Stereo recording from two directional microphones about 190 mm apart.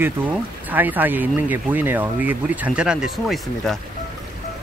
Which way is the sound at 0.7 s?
10° right (ahead or behind).